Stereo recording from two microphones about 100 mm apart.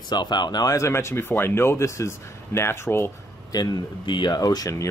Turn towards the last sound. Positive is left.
turn(degrees=35)  # may be behind; listen again after turning